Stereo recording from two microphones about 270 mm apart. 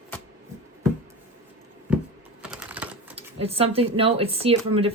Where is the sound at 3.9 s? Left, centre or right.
Right.